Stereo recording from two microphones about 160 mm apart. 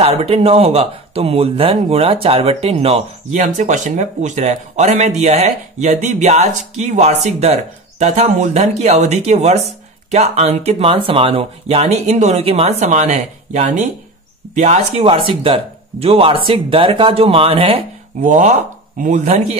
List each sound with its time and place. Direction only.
0.0 s speech: 40° right (ahead or behind)
18.9 s speech: 50° right (ahead or behind)